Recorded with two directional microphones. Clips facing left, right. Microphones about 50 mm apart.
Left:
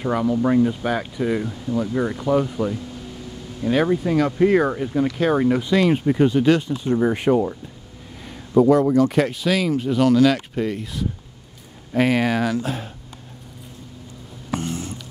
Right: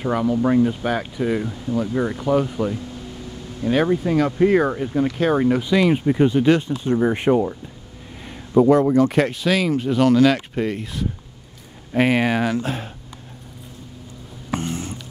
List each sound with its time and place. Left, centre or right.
0.0 s speech: centre
0.7 s speech: centre
1.2 s speech: centre
3.8 s speech: centre
5.0 s speech: right
5.3 s speech: centre
6.1 s speech: centre; by 11.1 s right
11.9 s speech: right
12.5 s speech: right
14.5 s a sound: right